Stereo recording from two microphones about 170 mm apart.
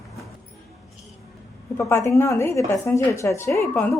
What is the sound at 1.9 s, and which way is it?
A woman's voice, 15° left (ahead or behind).